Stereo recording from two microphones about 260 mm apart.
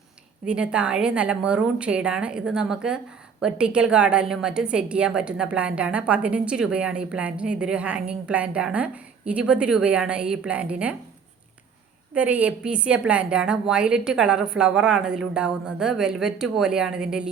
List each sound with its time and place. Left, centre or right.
0.4 s a woman's voice: centre
12.1 s a woman's voice: centre